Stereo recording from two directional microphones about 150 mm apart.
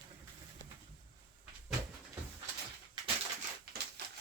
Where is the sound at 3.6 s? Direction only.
90° right.